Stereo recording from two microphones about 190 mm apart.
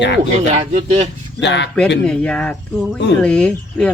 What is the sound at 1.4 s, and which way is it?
Speech, 65° left (ahead or behind).